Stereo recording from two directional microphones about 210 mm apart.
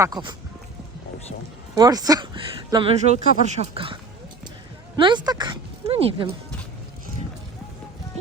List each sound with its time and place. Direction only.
0.0 s speech: 20° right (ahead or behind)
1.7 s speech: 20° right (ahead or behind)
3.0 s speech: 35° right (ahead or behind)
4.9 s speech: 20° right (ahead or behind)